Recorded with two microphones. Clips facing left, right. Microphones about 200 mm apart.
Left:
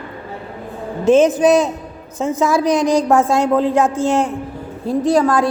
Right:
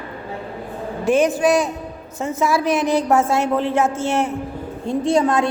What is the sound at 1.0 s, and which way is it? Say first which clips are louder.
Music: left 5 dB; 20° left (ahead or behind).